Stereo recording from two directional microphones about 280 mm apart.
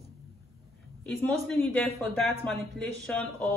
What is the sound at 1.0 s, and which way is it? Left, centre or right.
A woman's voice, centre.